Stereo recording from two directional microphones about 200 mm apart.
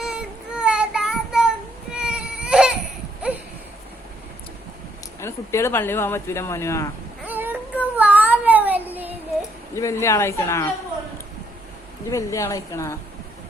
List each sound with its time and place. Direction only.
0.0 s child singing: 5° right (ahead or behind)
5.2 s speech: 15° left (ahead or behind)
7.3 s child singing: 10° right (ahead or behind)
7.9 s a sound: 10° right (ahead or behind)
9.7 s speech: 15° left (ahead or behind)
12.1 s speech: 15° left (ahead or behind)